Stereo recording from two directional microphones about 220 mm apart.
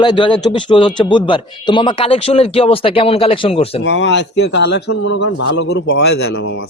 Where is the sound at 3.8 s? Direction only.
55° left (ahead or behind).